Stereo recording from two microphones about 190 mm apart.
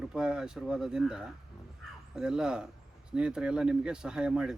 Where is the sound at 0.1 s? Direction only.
5° right (ahead or behind).